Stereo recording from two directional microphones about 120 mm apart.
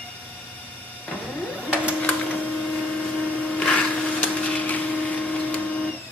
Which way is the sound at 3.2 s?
15° left (ahead or behind).